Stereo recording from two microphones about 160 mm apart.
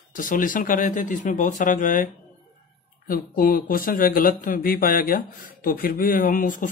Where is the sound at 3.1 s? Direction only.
65° left (ahead or behind).